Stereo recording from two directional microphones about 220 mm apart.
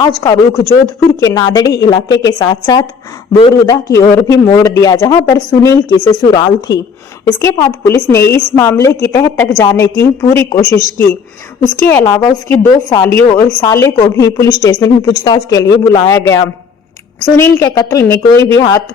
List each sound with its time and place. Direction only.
0.2 s a man's voice: 10° left (ahead or behind)
11.9 s a man's voice: 15° left (ahead or behind)